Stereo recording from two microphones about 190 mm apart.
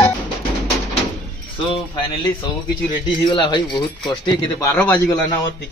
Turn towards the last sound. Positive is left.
turn(degrees=10)  # may be behind; listen again after turning